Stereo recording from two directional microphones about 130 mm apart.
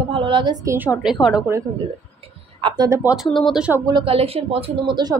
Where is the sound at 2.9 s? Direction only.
15° right (ahead or behind).